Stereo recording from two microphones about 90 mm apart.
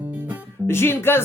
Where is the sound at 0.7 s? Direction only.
25° left (ahead or behind).